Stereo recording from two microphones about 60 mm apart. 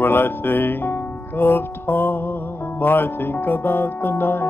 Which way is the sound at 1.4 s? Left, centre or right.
Left.